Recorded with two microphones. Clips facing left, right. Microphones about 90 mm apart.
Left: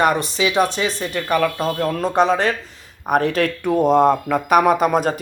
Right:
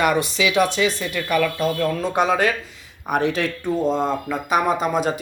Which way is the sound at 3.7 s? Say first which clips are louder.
Left 7 dB; 65° left (ahead or behind).